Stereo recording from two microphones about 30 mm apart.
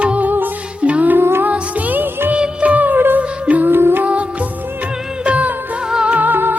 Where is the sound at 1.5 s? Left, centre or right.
Right.